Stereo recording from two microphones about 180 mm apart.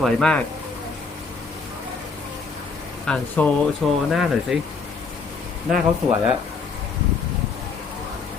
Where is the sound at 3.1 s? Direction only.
5° left (ahead or behind).